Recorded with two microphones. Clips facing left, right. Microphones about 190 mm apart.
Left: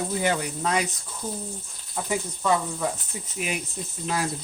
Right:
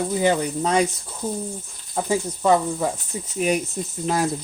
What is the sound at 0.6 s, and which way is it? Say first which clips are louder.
Speech: right 6 dB; 30° right (ahead or behind).